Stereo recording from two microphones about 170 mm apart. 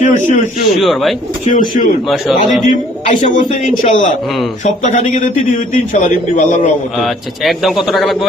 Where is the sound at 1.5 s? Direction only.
50° left (ahead or behind).